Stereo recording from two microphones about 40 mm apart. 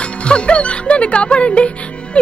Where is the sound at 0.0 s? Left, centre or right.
Left.